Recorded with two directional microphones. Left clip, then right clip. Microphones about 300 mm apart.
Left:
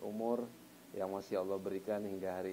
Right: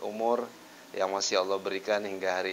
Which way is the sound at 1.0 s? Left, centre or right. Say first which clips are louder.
Right 11 dB; centre.